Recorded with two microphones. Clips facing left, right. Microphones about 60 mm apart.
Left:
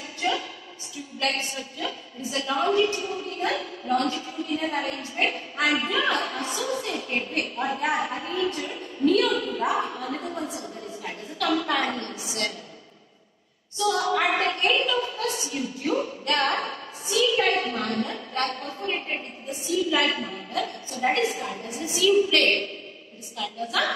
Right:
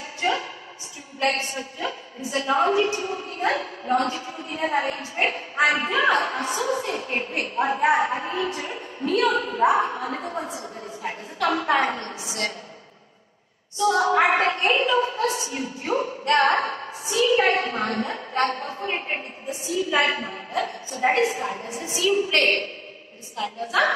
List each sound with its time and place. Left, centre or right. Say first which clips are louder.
0.2 s a sound: right 2 dB; right
1.2 s a woman's voice: right 4 dB; right
13.7 s a woman's voice: right 4 dB; right